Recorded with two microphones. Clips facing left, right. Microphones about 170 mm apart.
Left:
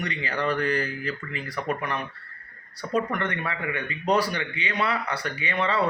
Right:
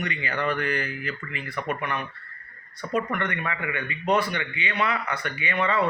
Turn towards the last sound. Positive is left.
turn(degrees=35)  # may be behind; listen again after turning